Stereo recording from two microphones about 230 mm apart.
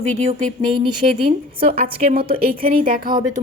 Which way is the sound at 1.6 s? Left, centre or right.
Right.